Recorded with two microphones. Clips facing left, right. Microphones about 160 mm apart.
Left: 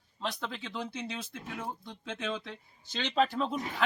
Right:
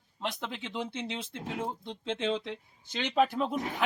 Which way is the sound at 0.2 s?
20° right (ahead or behind).